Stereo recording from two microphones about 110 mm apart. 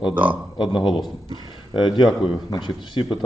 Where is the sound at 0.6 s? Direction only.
50° left (ahead or behind).